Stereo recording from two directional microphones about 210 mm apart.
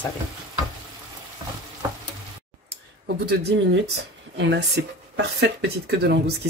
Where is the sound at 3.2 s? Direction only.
55° right (ahead or behind).